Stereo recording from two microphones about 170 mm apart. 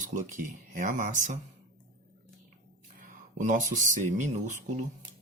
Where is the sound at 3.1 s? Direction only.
50° right (ahead or behind).